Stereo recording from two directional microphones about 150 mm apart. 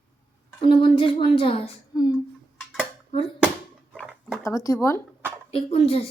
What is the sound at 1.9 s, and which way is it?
Speech, 25° left (ahead or behind).